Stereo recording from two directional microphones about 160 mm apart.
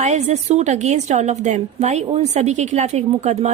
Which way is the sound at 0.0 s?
45° right (ahead or behind).